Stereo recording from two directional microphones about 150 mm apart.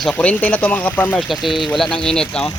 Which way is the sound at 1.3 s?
Centre (ahead or behind).